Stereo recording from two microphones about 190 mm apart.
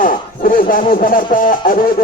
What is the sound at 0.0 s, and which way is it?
Speech, 45° left (ahead or behind).